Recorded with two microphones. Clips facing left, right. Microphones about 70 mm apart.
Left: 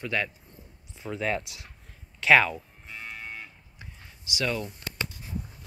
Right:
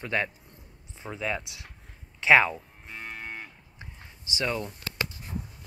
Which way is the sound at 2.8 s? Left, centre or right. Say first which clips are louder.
Right 1 dB; right.